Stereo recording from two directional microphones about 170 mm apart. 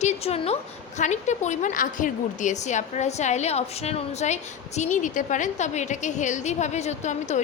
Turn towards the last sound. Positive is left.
turn(degrees=45)  # may be behind; listen again after turning